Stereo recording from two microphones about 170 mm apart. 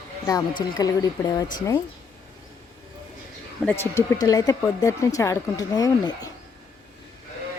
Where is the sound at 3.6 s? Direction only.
15° left (ahead or behind).